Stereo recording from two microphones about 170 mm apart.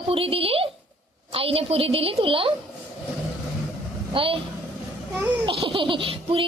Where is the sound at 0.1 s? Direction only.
35° right (ahead or behind).